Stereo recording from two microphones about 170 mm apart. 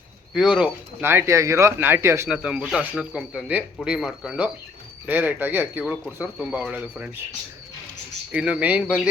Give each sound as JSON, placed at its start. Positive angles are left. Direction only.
{"t": 0.3, "sound": "speech", "side_deg": -5}
{"t": 8.3, "sound": "speech", "side_deg": -5}